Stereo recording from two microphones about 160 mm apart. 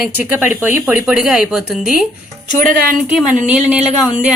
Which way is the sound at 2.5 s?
55° right (ahead or behind).